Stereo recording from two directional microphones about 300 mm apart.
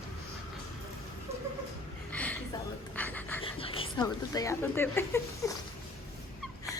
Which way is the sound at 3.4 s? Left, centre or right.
Centre.